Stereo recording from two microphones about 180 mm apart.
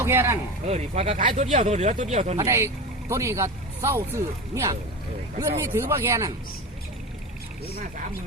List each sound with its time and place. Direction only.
0.0 s speech: 15° right (ahead or behind)
0.7 s speech: 40° right (ahead or behind)
2.4 s speech: 15° right (ahead or behind)